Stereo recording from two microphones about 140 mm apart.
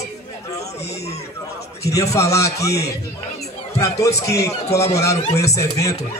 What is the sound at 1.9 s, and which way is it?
A man's voice, 25° left (ahead or behind).